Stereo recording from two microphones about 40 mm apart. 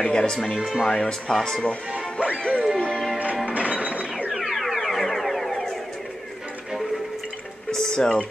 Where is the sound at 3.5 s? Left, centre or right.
Right.